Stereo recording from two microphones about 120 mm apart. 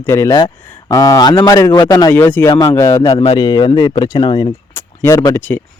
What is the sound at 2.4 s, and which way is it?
Speech, 35° left (ahead or behind).